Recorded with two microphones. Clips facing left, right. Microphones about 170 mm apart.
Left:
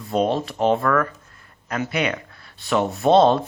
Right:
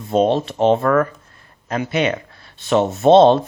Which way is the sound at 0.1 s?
25° right (ahead or behind).